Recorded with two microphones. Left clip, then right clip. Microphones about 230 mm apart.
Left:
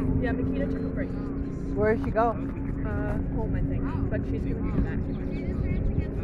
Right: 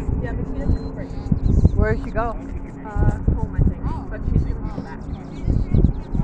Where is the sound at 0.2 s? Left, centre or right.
Left.